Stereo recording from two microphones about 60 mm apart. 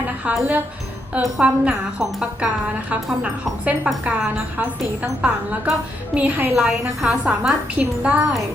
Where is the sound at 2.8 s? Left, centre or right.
Right.